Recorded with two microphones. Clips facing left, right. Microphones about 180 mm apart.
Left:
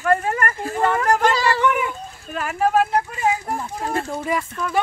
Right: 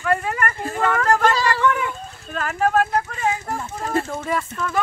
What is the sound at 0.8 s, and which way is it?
Speech, 20° left (ahead or behind).